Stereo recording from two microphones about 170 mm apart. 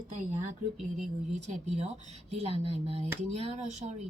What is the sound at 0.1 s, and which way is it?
A woman's voice, 40° right (ahead or behind).